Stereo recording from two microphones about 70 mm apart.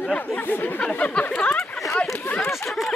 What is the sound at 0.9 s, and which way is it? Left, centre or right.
Speech, centre.